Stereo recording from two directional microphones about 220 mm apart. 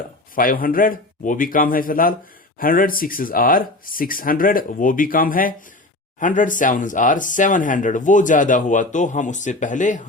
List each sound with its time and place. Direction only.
0.3 s speech: 40° left (ahead or behind)